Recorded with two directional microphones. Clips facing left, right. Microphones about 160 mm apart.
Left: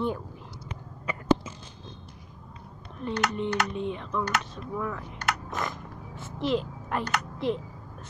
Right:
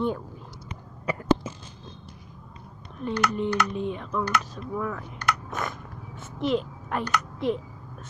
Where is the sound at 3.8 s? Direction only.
5° right (ahead or behind).